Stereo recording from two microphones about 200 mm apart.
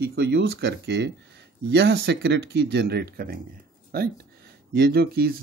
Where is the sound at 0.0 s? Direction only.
55° right (ahead or behind).